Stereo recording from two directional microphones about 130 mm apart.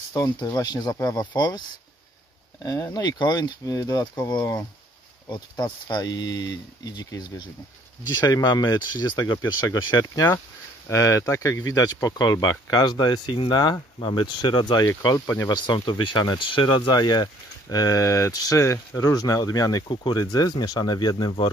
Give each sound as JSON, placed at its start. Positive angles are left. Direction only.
{"t": 0.1, "sound": "speech", "side_deg": 30}
{"t": 2.6, "sound": "speech", "side_deg": 30}